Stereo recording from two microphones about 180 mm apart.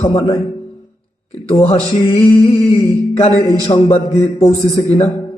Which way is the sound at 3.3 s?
20° right (ahead or behind).